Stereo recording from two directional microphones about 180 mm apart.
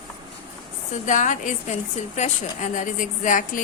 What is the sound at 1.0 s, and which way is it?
Speech, 45° left (ahead or behind).